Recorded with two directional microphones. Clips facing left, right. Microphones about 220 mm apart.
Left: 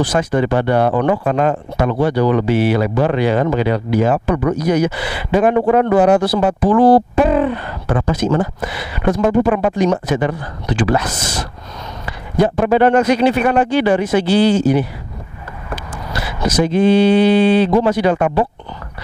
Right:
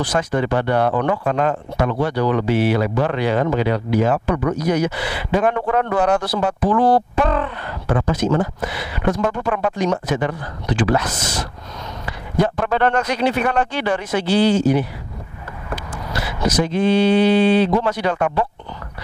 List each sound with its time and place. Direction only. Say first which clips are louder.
0.0 s speech: left 4 dB; 5° left (ahead or behind)
11.1 s speech: left 2 dB; 20° left (ahead or behind)
12.1 s speech: left 4 dB; 10° left (ahead or behind)
16.6 s speech: left 5 dB; 5° left (ahead or behind)